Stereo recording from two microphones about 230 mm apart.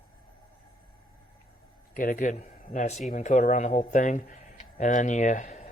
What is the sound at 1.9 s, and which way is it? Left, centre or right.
Speech, left.